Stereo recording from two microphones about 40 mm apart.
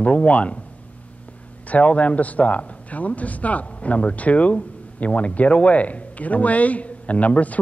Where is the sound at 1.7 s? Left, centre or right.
Left.